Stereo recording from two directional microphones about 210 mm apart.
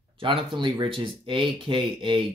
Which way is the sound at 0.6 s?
25° right (ahead or behind).